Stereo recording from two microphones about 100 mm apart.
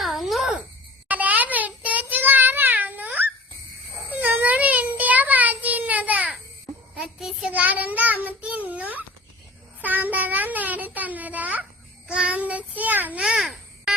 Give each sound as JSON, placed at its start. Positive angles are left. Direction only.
{"t": 0.0, "sound": "a sound", "side_deg": 0}
{"t": 1.0, "sound": "child singing", "side_deg": -15}
{"t": 4.1, "sound": "child singing", "side_deg": -15}
{"t": 9.8, "sound": "a sound", "side_deg": -15}
{"t": 12.0, "sound": "child singing", "side_deg": -10}
{"t": 13.2, "sound": "babbling", "side_deg": -5}